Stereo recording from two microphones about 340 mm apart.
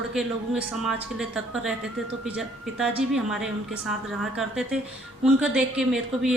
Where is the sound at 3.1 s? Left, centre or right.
Centre.